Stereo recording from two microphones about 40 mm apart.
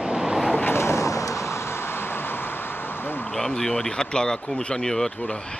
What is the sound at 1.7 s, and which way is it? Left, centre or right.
Vehicle, left.